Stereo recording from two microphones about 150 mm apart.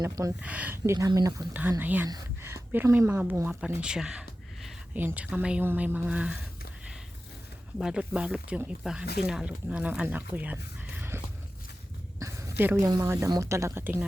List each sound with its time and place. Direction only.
0.0 s speech: 25° right (ahead or behind)
0.4 s speech: 10° right (ahead or behind); by 1.5 s 25° right (ahead or behind)
1.8 s speech: 15° right (ahead or behind)
7.8 s speech: 5° right (ahead or behind)
12.2 s a woman's voice: 20° right (ahead or behind)